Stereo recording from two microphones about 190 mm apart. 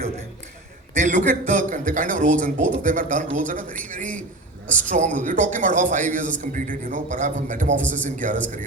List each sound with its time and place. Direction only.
0.9 s a man's voice: 40° right (ahead or behind)
5.1 s a man's voice: 45° right (ahead or behind)